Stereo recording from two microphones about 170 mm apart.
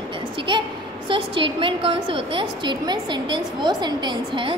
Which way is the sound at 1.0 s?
30° right (ahead or behind).